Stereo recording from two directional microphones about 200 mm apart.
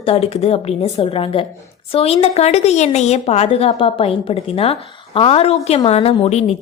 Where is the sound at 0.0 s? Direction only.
30° left (ahead or behind).